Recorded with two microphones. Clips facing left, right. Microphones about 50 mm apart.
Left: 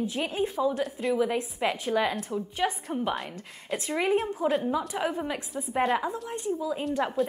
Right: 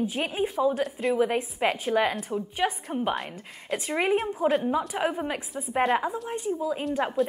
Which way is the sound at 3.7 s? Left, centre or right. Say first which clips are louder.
Right 1 dB; right.